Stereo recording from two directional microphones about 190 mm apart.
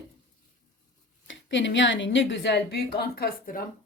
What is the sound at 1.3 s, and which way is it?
A woman's voice, 75° left (ahead or behind).